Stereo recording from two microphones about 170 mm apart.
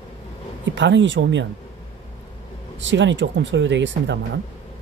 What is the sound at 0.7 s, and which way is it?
Speech, 90° right.